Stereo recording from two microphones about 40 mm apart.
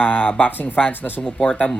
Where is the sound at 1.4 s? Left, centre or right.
Left.